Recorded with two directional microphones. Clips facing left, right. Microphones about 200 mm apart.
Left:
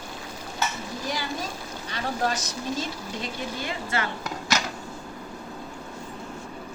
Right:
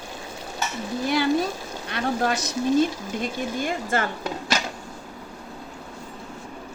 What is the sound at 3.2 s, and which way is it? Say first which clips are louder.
Speech: right 6 dB; 50° right (ahead or behind).